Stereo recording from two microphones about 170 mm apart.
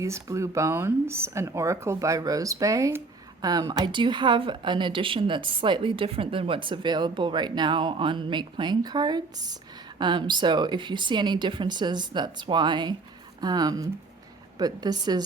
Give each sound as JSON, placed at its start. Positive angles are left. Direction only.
{"t": 0.0, "sound": "a woman's voice", "side_deg": -15}